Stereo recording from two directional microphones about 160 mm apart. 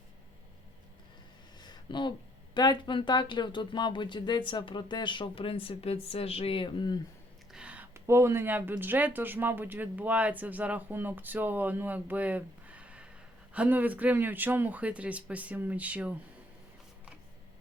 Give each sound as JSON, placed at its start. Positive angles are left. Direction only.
{"t": 1.6, "sound": "a sound", "side_deg": 25}
{"t": 2.6, "sound": "speech", "side_deg": 30}
{"t": 7.5, "sound": "speech", "side_deg": -5}